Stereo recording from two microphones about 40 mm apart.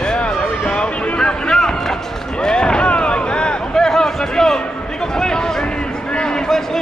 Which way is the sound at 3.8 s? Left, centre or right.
Centre.